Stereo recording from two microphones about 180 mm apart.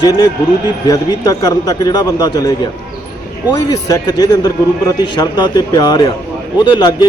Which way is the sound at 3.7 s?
20° left (ahead or behind).